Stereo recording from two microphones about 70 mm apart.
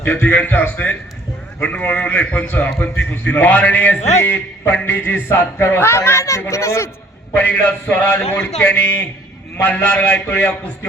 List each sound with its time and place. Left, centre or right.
0.0 s a man's voice: left
4.2 s a man's voice: left
7.3 s a man's voice: centre